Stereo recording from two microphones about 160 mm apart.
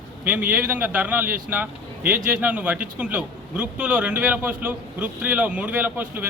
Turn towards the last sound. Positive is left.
turn(degrees=-10)  # may be behind; listen again after turning